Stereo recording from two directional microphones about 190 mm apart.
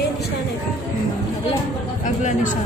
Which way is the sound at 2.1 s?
40° left (ahead or behind).